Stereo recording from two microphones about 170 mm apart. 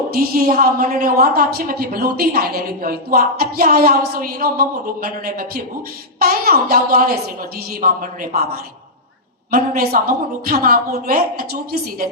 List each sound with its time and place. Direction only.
0.1 s a woman's voice: 60° right (ahead or behind)
9.5 s a woman's voice: 60° right (ahead or behind)